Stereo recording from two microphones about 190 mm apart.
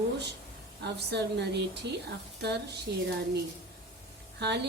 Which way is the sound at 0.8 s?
65° right (ahead or behind).